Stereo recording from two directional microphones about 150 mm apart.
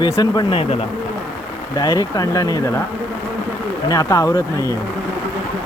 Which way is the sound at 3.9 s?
20° left (ahead or behind).